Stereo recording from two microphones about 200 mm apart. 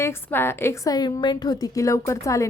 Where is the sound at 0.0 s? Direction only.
10° left (ahead or behind).